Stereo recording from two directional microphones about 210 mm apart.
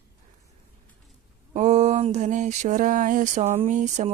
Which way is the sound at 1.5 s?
35° right (ahead or behind).